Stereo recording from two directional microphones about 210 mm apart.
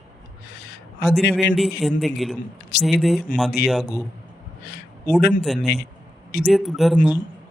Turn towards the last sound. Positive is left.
turn(degrees=0)  # may be behind; listen again after turning